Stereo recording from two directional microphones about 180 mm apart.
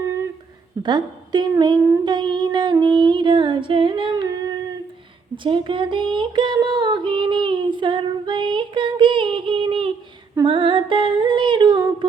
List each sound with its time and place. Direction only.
0.8 s a sound: 25° right (ahead or behind)
5.4 s child singing: 25° right (ahead or behind)
10.4 s humming: 30° right (ahead or behind)